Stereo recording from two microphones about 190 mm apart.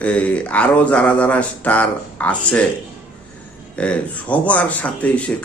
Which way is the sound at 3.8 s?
5° left (ahead or behind).